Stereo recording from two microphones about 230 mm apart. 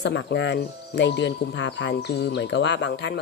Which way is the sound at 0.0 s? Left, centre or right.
Left.